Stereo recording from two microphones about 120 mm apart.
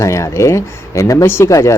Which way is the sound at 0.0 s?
25° left (ahead or behind).